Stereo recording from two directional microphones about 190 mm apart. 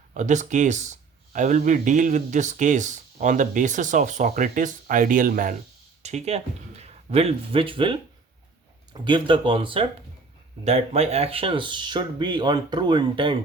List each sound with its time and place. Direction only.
0.1 s speech: 40° right (ahead or behind)